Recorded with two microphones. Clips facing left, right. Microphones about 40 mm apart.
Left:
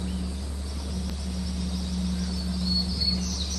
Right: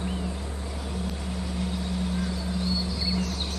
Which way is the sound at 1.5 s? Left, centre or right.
Right.